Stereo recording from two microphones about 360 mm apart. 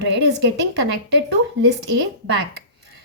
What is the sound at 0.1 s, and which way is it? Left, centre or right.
A woman's voice, right.